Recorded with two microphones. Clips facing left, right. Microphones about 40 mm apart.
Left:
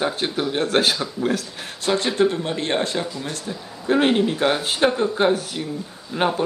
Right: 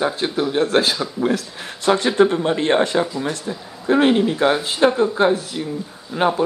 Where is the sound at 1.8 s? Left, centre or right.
Right.